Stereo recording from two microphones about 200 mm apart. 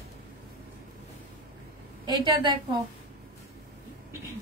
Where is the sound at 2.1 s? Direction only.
20° right (ahead or behind).